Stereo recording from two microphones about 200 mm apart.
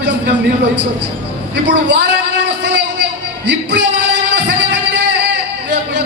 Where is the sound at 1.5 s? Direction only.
60° right (ahead or behind).